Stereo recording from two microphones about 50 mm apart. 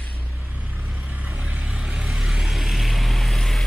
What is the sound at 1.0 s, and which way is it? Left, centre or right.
Vehicle, right.